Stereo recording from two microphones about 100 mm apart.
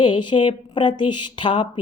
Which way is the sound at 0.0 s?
55° left (ahead or behind).